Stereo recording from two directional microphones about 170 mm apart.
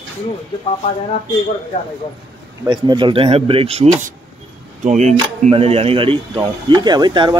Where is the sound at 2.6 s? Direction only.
25° right (ahead or behind).